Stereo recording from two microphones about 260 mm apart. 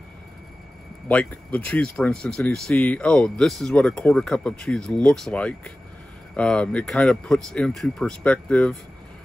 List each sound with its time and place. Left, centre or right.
1.0 s speech: centre